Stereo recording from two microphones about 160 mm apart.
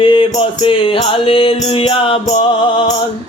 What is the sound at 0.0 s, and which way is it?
Mantra, 30° left (ahead or behind).